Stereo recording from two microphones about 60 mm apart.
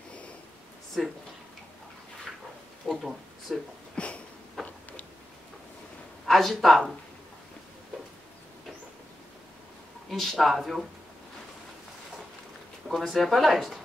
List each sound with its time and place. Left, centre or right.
1.0 s speech: centre
2.3 s a sound: centre
2.9 s speech: centre
3.9 s a sound: centre
6.2 s speech: centre
10.0 s speech: centre
12.8 s speech: centre